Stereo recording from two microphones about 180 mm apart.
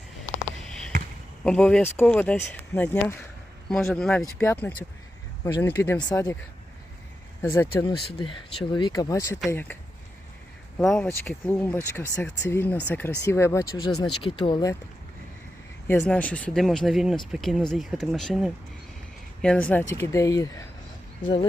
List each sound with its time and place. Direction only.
0.7 s basketball bounce: 5° left (ahead or behind)
1.5 s speech: 5° left (ahead or behind)
7.4 s speech: 15° left (ahead or behind)
8.2 s speech: 25° left (ahead or behind); by 9.7 s 10° left (ahead or behind)
10.8 s speech: 5° left (ahead or behind); by 14.7 s 25° left (ahead or behind)
15.9 s speech: 10° left (ahead or behind)
21.2 s speech: 30° left (ahead or behind)